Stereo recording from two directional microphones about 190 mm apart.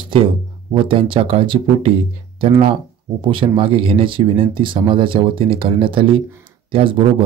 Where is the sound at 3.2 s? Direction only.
25° right (ahead or behind).